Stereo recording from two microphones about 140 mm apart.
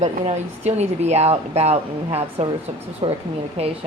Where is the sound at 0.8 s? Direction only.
50° right (ahead or behind).